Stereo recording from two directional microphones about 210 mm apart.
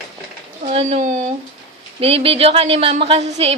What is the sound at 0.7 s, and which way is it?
A woman's voice, 30° right (ahead or behind).